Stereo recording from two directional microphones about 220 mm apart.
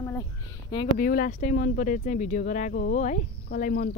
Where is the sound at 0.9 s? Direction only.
40° left (ahead or behind).